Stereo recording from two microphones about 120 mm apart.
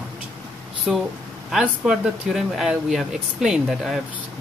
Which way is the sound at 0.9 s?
5° right (ahead or behind).